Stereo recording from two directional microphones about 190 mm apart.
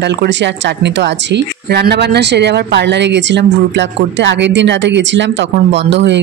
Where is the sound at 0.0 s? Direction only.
65° right (ahead or behind).